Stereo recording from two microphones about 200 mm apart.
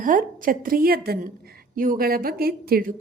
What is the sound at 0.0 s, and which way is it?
A woman's voice, 40° right (ahead or behind).